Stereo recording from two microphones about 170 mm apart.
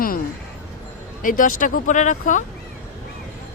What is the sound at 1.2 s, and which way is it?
Speech, 50° left (ahead or behind).